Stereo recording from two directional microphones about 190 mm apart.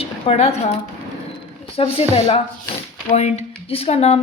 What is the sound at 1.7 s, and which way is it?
Speech, 30° left (ahead or behind).